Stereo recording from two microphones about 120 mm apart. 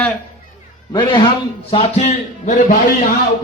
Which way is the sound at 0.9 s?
40° left (ahead or behind).